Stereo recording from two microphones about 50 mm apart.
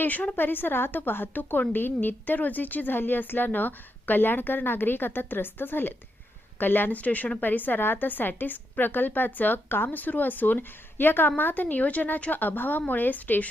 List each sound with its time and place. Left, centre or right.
0.0 s a woman's voice: left
6.9 s a woman's voice: left